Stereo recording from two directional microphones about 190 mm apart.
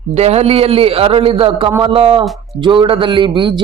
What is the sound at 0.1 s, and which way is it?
Speech, 35° right (ahead or behind).